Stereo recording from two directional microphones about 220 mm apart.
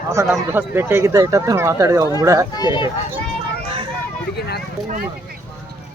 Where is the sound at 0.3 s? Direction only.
10° right (ahead or behind).